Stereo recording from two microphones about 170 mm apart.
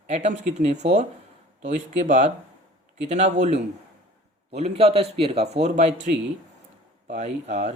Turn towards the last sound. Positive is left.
turn(degrees=-40)  # may be behind; listen again after turning